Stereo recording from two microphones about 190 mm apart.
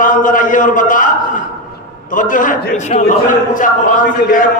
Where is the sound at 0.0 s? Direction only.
45° left (ahead or behind).